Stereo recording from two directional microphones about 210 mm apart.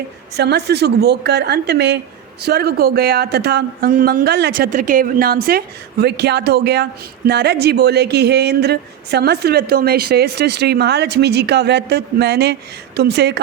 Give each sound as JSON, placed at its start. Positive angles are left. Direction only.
{"t": 0.3, "sound": "speech", "side_deg": -50}